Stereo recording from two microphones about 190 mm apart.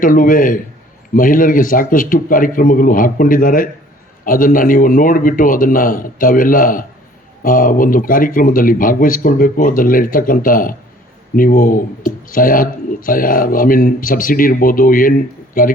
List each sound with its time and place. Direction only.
0.0 s speech: 45° left (ahead or behind)